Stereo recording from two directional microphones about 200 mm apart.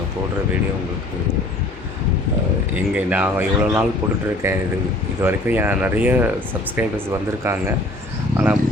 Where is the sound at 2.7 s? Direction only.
10° right (ahead or behind).